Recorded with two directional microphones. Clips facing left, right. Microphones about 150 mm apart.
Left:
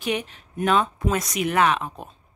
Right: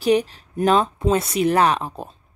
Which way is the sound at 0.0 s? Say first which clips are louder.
Right 9 dB; 35° right (ahead or behind).